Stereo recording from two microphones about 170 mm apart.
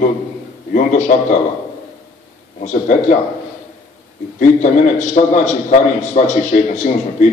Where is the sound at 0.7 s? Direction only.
45° left (ahead or behind).